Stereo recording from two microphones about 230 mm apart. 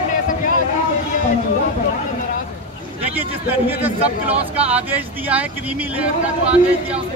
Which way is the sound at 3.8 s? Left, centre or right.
Centre.